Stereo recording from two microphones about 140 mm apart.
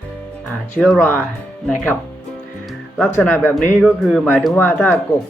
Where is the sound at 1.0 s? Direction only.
15° left (ahead or behind).